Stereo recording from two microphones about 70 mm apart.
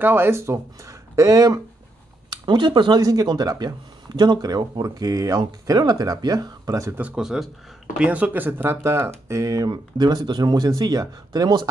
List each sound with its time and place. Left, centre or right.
0.0 s speech: right
2.5 s speech: right
5.8 s speech: right
7.2 s speech: centre
8.0 s speech: right
9.7 s speech: right
10.7 s speech: right